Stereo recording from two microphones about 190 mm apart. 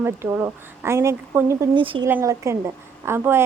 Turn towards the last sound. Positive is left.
turn(degrees=-10)  # may be behind; listen again after turning